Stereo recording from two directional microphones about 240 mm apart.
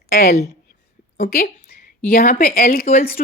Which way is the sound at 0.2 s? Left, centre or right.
Left.